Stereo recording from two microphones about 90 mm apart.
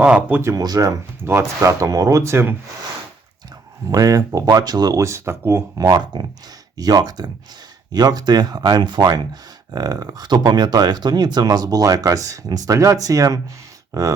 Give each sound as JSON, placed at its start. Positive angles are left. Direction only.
{"t": 0.0, "sound": "speech", "side_deg": -15}
{"t": 0.4, "sound": "speech", "side_deg": -45}
{"t": 3.8, "sound": "speech", "side_deg": -40}
{"t": 5.8, "sound": "speech", "side_deg": -50}